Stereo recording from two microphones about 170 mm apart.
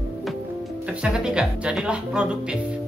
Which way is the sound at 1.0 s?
5° right (ahead or behind).